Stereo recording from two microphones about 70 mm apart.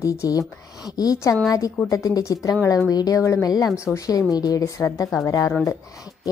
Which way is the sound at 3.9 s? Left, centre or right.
Left.